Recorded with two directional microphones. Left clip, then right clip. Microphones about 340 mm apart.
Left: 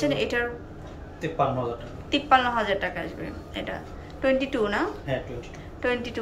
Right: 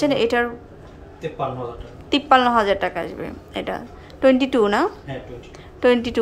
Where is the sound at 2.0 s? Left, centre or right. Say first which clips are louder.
Right 5 dB; centre.